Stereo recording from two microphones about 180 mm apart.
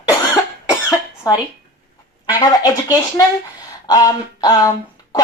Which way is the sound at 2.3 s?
20° left (ahead or behind).